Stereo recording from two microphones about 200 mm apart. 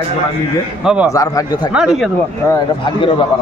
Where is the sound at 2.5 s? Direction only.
20° left (ahead or behind).